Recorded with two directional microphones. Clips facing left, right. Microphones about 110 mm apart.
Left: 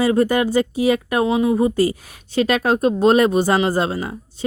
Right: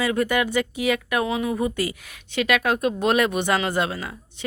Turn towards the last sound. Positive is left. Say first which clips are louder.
# left 5 dB
turn(degrees=35)  # may be behind; listen again after turning